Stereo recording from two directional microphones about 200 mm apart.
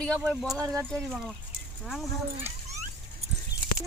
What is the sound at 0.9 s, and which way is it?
Speech, centre (ahead or behind).